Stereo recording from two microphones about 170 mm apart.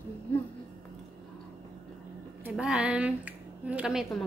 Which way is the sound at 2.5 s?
5° right (ahead or behind).